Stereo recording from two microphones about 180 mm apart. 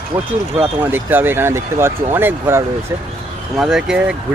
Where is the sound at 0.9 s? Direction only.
10° right (ahead or behind).